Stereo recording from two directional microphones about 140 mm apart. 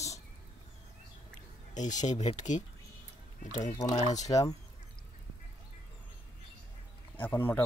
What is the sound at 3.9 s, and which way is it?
Speech, 55° left (ahead or behind).